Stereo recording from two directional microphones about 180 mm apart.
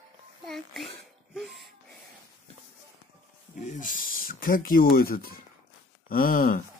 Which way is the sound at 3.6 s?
45° left (ahead or behind).